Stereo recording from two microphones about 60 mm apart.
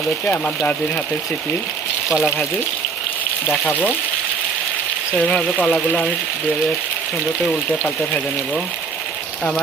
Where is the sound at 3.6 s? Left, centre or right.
Left.